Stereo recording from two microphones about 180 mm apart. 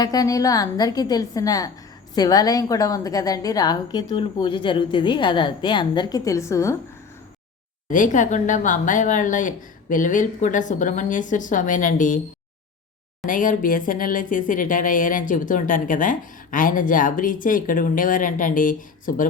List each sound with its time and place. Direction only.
0.0 s a woman's voice: 20° left (ahead or behind)
7.9 s speech: 45° left (ahead or behind)
13.2 s speech: 45° left (ahead or behind)